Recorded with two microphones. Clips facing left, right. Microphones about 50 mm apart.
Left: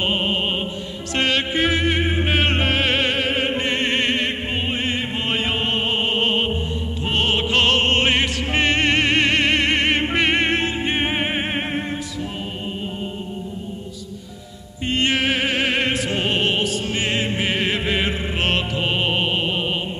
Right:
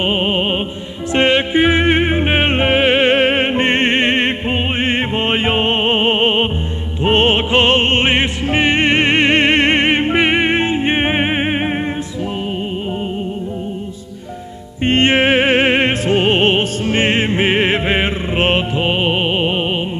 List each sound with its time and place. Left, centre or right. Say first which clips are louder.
0.0 s music: right 5 dB; right
14.9 s music: right 7 dB; right